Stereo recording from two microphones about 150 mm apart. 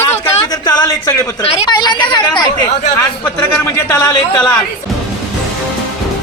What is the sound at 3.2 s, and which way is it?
A man's voice, 15° left (ahead or behind).